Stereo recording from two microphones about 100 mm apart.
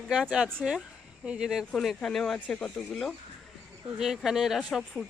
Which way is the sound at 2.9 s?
Centre (ahead or behind).